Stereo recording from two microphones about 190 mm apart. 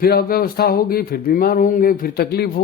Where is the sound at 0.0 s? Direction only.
55° left (ahead or behind).